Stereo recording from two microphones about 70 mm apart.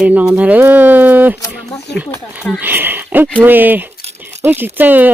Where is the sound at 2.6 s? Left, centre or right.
Right.